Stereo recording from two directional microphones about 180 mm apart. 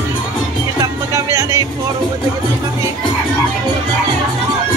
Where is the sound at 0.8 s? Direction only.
20° right (ahead or behind).